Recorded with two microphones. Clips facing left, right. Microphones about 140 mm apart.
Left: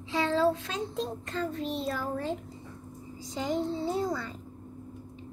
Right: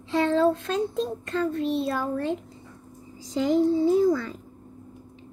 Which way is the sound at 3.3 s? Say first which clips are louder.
Right 8 dB; 90° right.